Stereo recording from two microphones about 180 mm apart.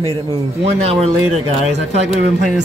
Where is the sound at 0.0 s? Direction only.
30° right (ahead or behind).